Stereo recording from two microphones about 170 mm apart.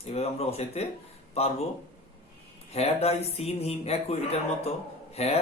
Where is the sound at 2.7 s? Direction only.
35° left (ahead or behind).